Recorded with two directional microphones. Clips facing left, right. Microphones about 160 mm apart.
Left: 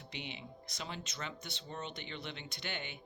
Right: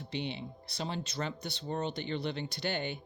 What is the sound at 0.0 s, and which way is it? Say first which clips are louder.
Speech: right 9 dB; 35° right (ahead or behind).